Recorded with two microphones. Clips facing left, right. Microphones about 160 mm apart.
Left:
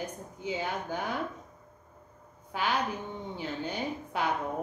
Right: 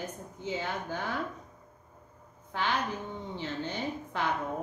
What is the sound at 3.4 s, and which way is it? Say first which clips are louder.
Speech: left 1 dB; 10° left (ahead or behind).